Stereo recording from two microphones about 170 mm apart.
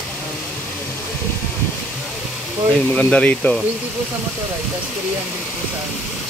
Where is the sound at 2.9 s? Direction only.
5° left (ahead or behind).